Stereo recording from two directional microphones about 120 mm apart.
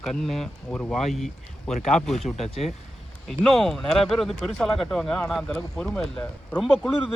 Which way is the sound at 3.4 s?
5° left (ahead or behind).